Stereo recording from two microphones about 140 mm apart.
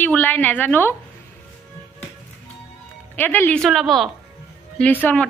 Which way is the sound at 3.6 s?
Centre (ahead or behind).